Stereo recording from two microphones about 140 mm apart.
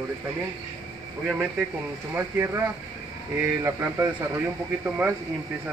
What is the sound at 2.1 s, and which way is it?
Speech, 20° right (ahead or behind).